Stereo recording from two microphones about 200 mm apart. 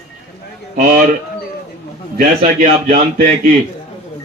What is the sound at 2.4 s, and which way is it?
Speech, 35° right (ahead or behind).